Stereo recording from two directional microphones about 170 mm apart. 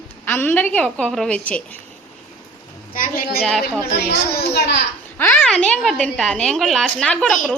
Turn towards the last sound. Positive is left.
turn(degrees=5)  # may be behind; listen again after turning